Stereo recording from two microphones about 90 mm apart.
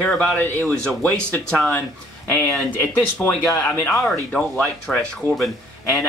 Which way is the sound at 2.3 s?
20° left (ahead or behind).